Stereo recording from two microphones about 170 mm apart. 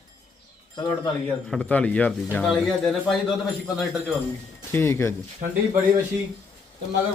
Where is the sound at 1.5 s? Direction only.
5° left (ahead or behind).